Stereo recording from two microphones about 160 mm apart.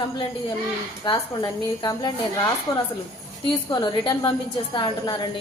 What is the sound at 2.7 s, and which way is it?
A woman's voice, 20° left (ahead or behind).